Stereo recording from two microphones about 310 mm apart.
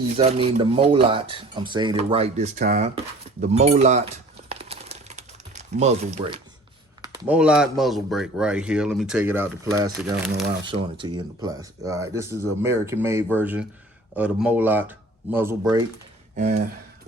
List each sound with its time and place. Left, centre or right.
0.2 s speech: centre
4.4 s crumpling: centre
7.0 s speech: centre
16.3 s speech: right